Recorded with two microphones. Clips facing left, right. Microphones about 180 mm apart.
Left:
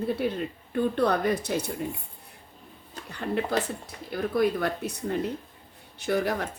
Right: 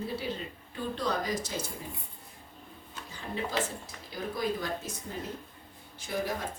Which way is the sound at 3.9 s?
60° left (ahead or behind).